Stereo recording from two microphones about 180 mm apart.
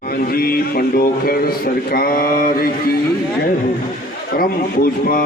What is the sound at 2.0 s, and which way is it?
Mantra, 55° left (ahead or behind).